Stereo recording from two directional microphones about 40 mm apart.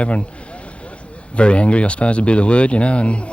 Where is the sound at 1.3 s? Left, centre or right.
Left.